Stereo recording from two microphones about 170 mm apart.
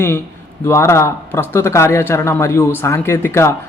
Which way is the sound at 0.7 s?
15° left (ahead or behind).